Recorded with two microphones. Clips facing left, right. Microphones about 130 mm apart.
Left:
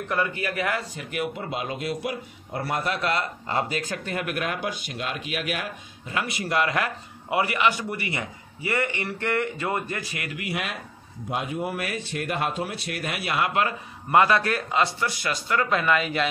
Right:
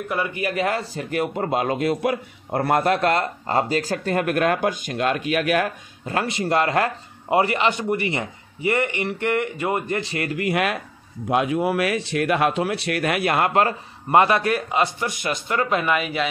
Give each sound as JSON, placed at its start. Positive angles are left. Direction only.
{"t": 0.1, "sound": "speech", "side_deg": -15}
{"t": 1.4, "sound": "a man's voice", "side_deg": -50}
{"t": 6.2, "sound": "speech", "side_deg": -25}
{"t": 11.2, "sound": "speech", "side_deg": -90}
{"t": 13.5, "sound": "a man's voice", "side_deg": -40}
{"t": 14.1, "sound": "speech", "side_deg": -20}